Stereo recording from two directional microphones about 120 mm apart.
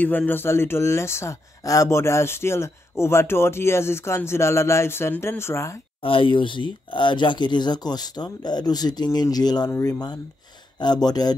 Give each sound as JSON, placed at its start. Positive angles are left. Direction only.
{"t": 0.0, "sound": "speech", "side_deg": 15}
{"t": 6.0, "sound": "speech", "side_deg": 45}